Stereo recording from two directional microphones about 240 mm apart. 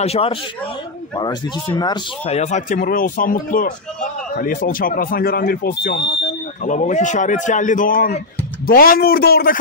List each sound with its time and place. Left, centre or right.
0.0 s speech: left